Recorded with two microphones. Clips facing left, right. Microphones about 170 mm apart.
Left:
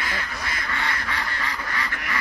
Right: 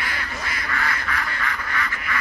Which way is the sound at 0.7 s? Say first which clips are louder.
Right 3 dB; 25° left (ahead or behind).